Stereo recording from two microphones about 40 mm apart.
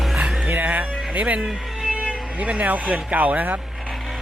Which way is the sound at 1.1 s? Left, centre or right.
Right.